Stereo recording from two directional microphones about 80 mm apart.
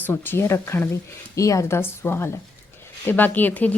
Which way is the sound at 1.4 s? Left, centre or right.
Left.